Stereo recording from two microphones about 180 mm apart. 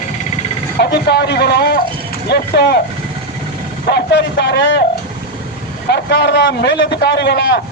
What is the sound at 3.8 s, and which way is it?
Speech, 65° left (ahead or behind).